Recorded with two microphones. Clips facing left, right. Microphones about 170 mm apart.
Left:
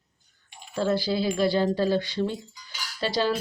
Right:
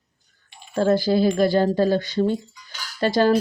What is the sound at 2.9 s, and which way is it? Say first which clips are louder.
Cutlery: right 7 dB; 50° right (ahead or behind).